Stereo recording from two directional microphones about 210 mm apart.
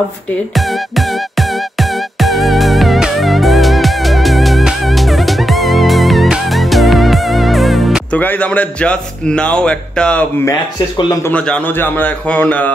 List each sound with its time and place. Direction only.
0.6 s music: centre (ahead or behind)
11.0 s a man's voice: 20° left (ahead or behind)
11.3 s a man's voice: 5° left (ahead or behind)